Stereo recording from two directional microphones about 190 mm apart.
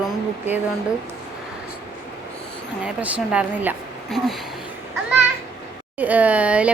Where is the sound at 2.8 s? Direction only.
5° right (ahead or behind).